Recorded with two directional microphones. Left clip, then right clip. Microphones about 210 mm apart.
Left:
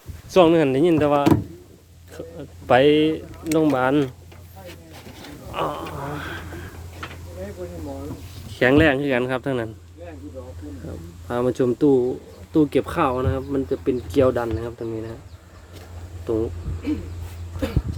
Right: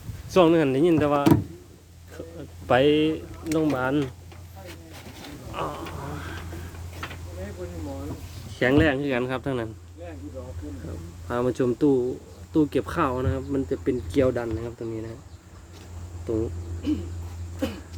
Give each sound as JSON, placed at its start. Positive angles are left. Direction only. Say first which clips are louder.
{"t": 0.3, "sound": "speech", "louder": "left 3 dB", "side_deg": 10}
{"t": 3.4, "sound": "speech", "louder": "left 5 dB", "side_deg": 25}
{"t": 5.5, "sound": "a sound", "louder": "left 6 dB", "side_deg": 30}
{"t": 8.4, "sound": "speech", "louder": "left 5 dB", "side_deg": 35}
{"t": 11.3, "sound": "speech", "louder": "left 3 dB", "side_deg": 15}